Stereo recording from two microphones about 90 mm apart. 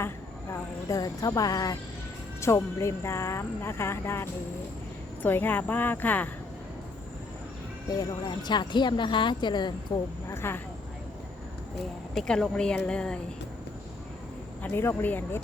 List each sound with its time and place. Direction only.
0.5 s speech: 40° left (ahead or behind); by 6.3 s 20° left (ahead or behind)
7.9 s speech: 55° left (ahead or behind)
10.2 s speech: 25° left (ahead or behind)
12.1 s a woman's voice: 5° left (ahead or behind)
14.6 s speech: 25° left (ahead or behind)